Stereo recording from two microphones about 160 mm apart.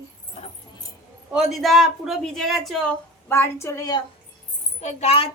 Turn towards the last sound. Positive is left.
turn(degrees=40)  # may be behind; listen again after turning